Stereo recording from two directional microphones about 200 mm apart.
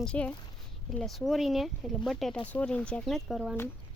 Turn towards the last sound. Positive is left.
turn(degrees=0)  # may be behind; listen again after turning